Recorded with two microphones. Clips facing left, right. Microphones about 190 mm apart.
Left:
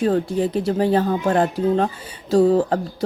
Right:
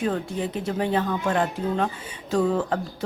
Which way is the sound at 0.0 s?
35° left (ahead or behind).